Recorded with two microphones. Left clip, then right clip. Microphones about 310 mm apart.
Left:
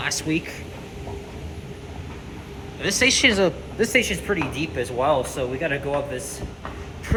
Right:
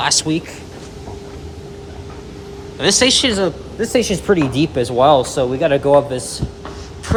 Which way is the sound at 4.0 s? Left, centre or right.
Centre.